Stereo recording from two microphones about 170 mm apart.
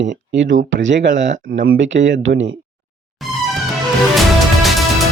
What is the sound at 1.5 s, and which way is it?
Speech, 75° right (ahead or behind).